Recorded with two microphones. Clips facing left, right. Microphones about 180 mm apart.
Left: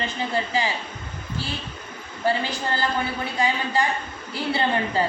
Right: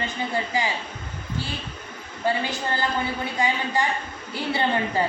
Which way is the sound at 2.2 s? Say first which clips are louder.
Left 1 dB; 20° right (ahead or behind).